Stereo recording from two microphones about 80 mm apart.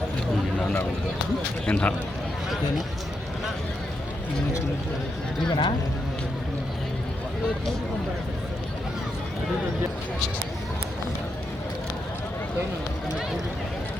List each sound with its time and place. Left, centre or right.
1.6 s speech: centre
5.5 s speech: left